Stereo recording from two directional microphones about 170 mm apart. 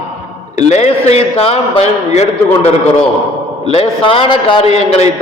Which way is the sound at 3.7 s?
35° left (ahead or behind).